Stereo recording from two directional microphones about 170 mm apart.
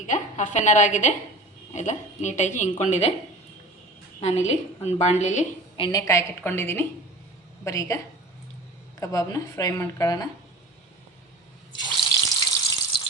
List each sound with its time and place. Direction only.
0.1 s a woman's voice: 45° left (ahead or behind)
4.2 s a woman's voice: 40° left (ahead or behind)
5.7 s a woman's voice: 25° left (ahead or behind)
12.2 s water: 25° left (ahead or behind)